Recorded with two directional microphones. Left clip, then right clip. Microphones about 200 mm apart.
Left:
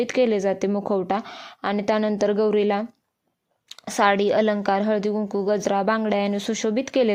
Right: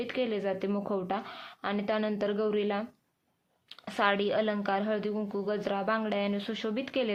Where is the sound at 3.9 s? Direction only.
40° left (ahead or behind).